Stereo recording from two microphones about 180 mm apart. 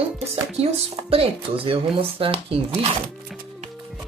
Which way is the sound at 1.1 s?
30° right (ahead or behind).